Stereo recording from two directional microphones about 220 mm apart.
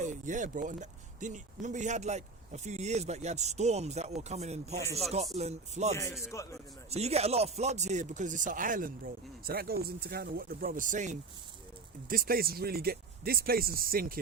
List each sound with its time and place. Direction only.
0.0 s speech: 35° right (ahead or behind)
6.3 s a man's voice: 15° left (ahead or behind)
6.9 s speech: 30° right (ahead or behind)